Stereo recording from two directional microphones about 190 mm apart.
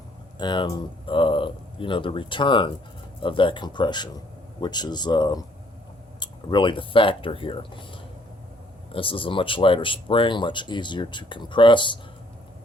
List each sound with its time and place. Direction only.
0.3 s speech: 25° left (ahead or behind)